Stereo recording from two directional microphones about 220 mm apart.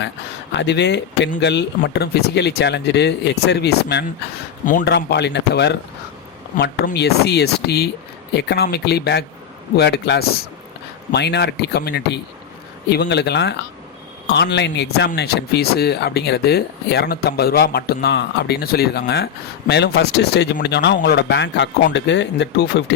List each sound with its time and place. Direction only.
0.5 s speech: 50° left (ahead or behind)
4.6 s speech: 35° left (ahead or behind)
6.8 s speech: 45° left (ahead or behind)